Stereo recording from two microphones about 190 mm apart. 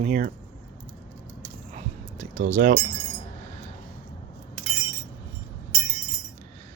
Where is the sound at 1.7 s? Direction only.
40° right (ahead or behind).